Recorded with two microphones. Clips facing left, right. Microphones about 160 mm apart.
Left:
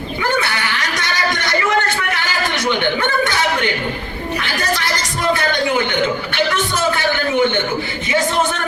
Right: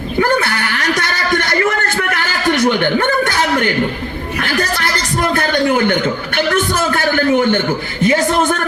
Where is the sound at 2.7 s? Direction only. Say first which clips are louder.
Right 3 dB; 45° right (ahead or behind).